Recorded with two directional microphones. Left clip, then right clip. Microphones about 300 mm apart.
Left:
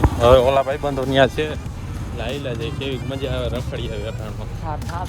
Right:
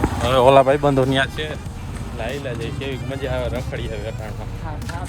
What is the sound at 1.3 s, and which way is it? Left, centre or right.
Speech, centre.